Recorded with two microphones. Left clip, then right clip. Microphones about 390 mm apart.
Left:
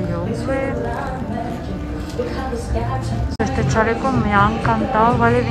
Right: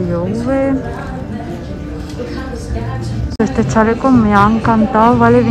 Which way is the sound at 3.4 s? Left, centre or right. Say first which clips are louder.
Right 5 dB; centre.